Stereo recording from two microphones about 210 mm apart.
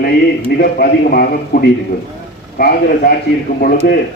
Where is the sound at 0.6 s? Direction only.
45° left (ahead or behind).